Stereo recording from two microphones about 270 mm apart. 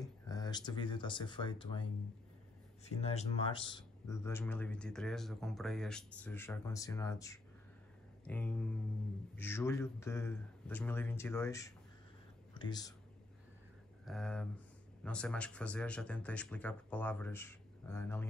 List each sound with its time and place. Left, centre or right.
0.0 s speech: centre
3.0 s speech: left
14.0 s speech: centre